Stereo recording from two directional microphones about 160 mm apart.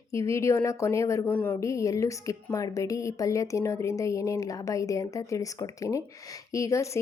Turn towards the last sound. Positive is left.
turn(degrees=20)  # may be behind; listen again after turning